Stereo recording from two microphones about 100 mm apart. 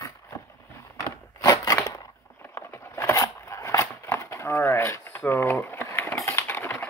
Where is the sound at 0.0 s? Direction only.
30° left (ahead or behind).